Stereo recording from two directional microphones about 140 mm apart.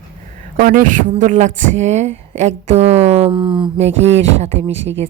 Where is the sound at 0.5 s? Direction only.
70° right (ahead or behind); by 3.7 s 35° right (ahead or behind).